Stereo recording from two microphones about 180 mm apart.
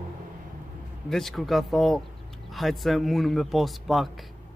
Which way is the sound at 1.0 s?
Centre (ahead or behind).